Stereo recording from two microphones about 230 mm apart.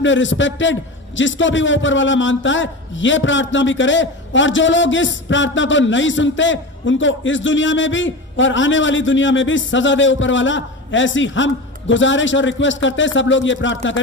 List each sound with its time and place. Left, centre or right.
0.0 s a man's voice: left